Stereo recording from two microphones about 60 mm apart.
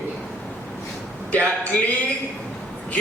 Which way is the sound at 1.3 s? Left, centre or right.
Left.